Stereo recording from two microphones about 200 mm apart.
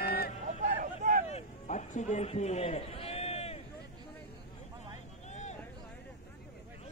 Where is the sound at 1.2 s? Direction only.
35° left (ahead or behind).